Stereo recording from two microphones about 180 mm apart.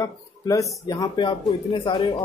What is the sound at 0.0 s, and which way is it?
A man's voice, 20° left (ahead or behind).